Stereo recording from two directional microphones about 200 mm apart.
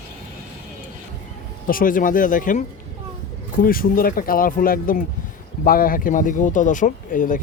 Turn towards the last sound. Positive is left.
turn(degrees=40)  # may be behind; listen again after turning